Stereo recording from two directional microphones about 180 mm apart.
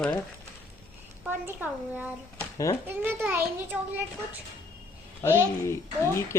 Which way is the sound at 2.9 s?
10° right (ahead or behind).